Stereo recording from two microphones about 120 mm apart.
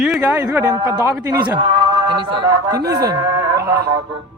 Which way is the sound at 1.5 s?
50° right (ahead or behind).